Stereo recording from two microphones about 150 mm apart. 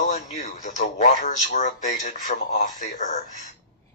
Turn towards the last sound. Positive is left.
turn(degrees=55)  # may be behind; listen again after turning